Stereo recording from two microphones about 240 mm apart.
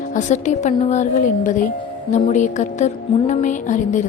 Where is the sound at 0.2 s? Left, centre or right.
Left.